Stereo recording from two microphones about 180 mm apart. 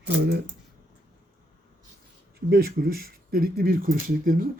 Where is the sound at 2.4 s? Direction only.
60° right (ahead or behind).